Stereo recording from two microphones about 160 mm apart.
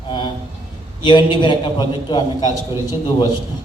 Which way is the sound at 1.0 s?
30° left (ahead or behind).